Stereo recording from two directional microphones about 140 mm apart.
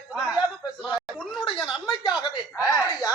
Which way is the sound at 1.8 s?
35° left (ahead or behind).